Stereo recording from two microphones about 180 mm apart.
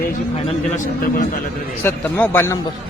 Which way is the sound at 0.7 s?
45° left (ahead or behind).